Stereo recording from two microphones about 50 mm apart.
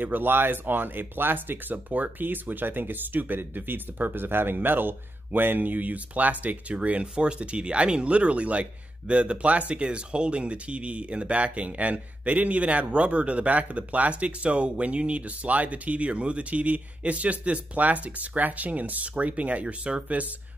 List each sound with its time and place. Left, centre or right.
0.0 s speech: right